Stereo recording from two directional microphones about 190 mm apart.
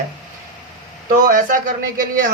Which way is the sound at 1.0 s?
45° right (ahead or behind).